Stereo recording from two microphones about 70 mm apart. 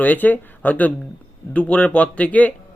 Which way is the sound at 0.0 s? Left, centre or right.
Left.